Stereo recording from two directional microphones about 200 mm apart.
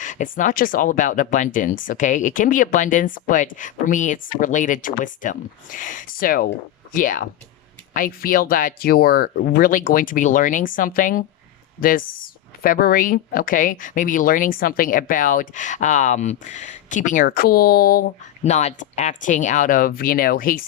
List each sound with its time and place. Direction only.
0.0 s speech: 40° left (ahead or behind)
18.4 s speech: 35° left (ahead or behind)